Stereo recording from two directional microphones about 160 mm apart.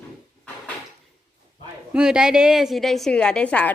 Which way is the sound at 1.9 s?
5° right (ahead or behind).